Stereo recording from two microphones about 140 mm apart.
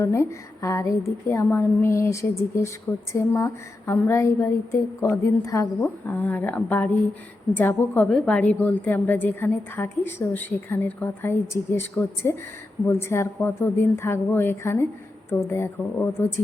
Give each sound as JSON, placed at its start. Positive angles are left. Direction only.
{"t": 0.0, "sound": "a woman's voice", "side_deg": 20}